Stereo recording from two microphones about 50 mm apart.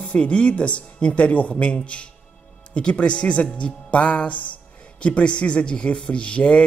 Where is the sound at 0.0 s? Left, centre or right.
Left.